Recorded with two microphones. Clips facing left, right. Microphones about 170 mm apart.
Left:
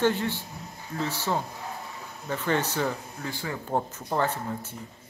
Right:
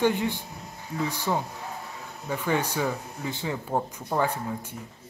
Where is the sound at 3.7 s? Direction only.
Centre (ahead or behind).